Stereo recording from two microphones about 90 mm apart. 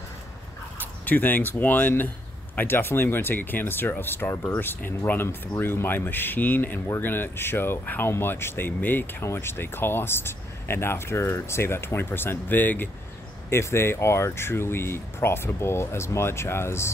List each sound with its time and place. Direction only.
0.7 s speech: 20° left (ahead or behind)